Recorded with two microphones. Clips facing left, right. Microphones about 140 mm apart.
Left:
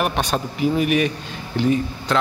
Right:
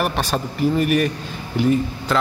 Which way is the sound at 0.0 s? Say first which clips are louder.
Even; centre (ahead or behind).